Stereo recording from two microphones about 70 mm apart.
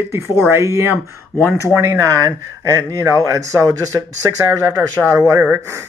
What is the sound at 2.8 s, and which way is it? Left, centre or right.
Speech, right.